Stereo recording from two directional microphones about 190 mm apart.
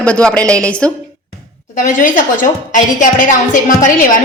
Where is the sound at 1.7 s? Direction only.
45° left (ahead or behind).